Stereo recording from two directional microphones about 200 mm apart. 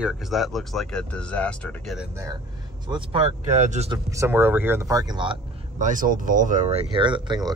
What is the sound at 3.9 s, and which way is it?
Speech, 15° right (ahead or behind).